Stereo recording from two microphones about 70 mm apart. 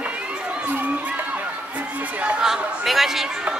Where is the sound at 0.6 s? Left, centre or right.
Right.